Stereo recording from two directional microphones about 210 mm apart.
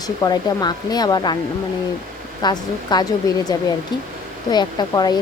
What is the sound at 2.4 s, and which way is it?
Speech, 20° left (ahead or behind).